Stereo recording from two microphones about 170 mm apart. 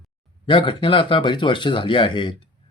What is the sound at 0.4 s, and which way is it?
Speech, 30° left (ahead or behind).